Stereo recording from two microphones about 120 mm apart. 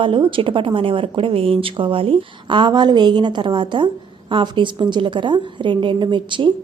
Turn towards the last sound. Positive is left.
turn(degrees=-45)  # may be behind; listen again after turning